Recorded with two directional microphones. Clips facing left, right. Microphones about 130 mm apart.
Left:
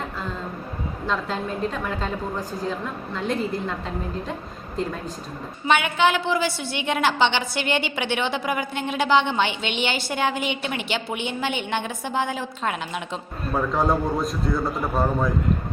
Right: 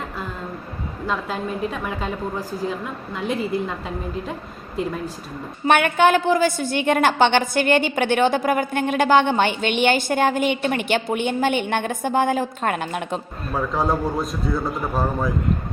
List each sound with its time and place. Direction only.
1.0 s a woman's voice: 5° right (ahead or behind)
5.6 s a woman's voice: 50° right (ahead or behind)
13.5 s a man's voice: centre (ahead or behind)